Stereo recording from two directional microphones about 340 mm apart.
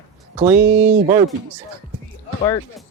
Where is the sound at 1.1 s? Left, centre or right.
Centre.